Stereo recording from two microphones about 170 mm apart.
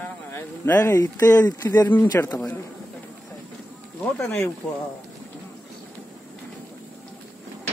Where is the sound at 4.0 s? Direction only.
10° left (ahead or behind).